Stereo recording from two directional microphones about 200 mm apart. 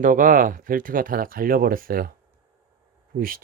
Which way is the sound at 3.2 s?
45° right (ahead or behind).